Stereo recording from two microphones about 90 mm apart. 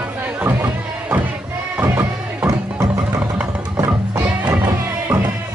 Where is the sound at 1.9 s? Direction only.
35° right (ahead or behind).